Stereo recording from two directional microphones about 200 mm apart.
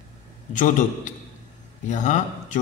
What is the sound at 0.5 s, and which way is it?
A man's voice, 40° left (ahead or behind).